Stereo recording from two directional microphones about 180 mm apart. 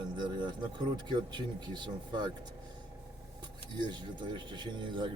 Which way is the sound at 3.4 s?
25° right (ahead or behind).